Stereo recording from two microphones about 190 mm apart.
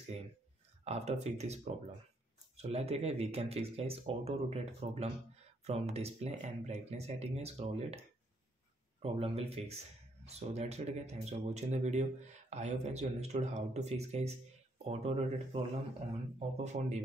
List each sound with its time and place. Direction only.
0.8 s speech: 35° right (ahead or behind)
9.0 s speech: 30° right (ahead or behind)